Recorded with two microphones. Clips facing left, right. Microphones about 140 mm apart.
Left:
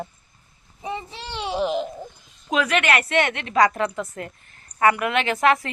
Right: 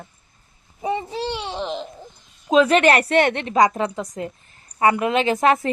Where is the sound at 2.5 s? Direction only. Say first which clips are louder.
Right 6 dB; 30° right (ahead or behind).